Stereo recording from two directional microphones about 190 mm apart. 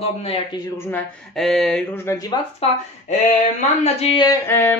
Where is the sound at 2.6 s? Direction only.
35° left (ahead or behind).